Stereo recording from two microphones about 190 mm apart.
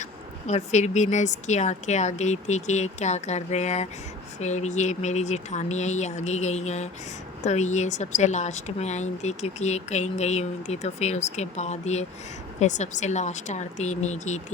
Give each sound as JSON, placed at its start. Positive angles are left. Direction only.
{"t": 0.0, "sound": "speech", "side_deg": 40}